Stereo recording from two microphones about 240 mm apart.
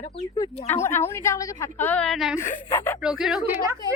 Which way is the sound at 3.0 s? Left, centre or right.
Centre.